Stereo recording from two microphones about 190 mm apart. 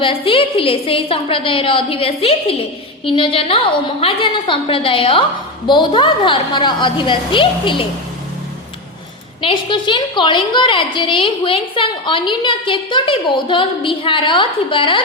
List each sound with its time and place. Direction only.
0.0 s a woman's voice: 30° left (ahead or behind)
9.4 s a woman's voice: 25° left (ahead or behind)